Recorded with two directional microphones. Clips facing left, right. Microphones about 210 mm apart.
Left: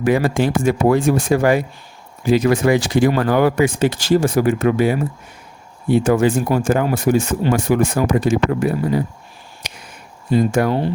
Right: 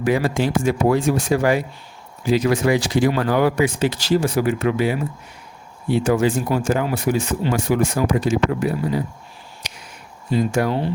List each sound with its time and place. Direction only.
0.0 s speech: 55° left (ahead or behind)
9.6 s a sound: 55° left (ahead or behind)
10.3 s speech: 50° left (ahead or behind)